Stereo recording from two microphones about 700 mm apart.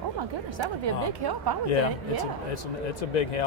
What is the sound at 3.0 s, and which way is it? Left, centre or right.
Speech, left.